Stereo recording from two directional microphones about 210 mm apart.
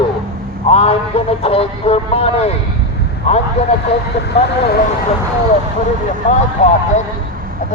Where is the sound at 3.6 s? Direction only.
30° left (ahead or behind).